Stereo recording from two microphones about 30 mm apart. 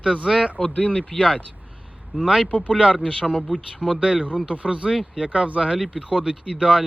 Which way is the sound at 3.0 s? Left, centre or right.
Left.